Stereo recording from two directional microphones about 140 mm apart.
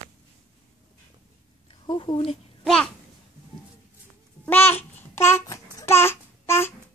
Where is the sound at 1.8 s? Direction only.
35° left (ahead or behind).